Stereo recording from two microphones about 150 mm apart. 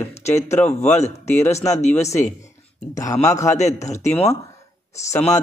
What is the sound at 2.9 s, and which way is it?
Speech, 20° left (ahead or behind).